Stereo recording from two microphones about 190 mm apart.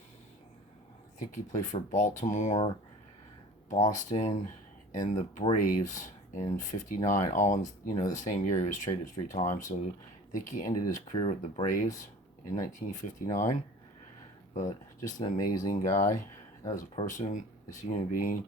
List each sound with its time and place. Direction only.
1.2 s speech: 40° left (ahead or behind)
5.5 s speech: 45° left (ahead or behind)